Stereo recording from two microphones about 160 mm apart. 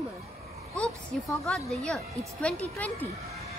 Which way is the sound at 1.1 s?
5° left (ahead or behind).